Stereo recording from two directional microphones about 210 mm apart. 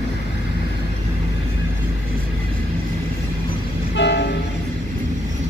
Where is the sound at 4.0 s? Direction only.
55° left (ahead or behind).